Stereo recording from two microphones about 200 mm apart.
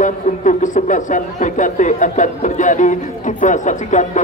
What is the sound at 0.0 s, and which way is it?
Speech, 40° left (ahead or behind).